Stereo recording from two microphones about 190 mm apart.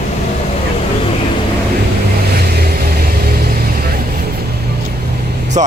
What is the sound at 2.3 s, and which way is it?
Vehicle, 55° right (ahead or behind).